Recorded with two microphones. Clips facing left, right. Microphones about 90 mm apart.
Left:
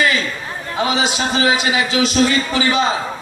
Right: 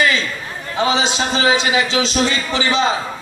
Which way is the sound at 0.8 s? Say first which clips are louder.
Right 1 dB; 25° right (ahead or behind).